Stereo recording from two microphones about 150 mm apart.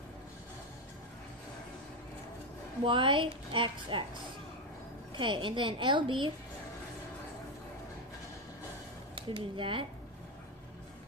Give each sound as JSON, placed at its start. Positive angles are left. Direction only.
{"t": 2.8, "sound": "a woman's voice", "side_deg": -35}
{"t": 5.1, "sound": "a woman's voice", "side_deg": -35}
{"t": 9.1, "sound": "speech", "side_deg": -35}